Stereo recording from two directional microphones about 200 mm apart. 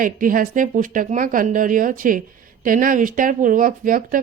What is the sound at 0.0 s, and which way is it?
Speech, 45° right (ahead or behind).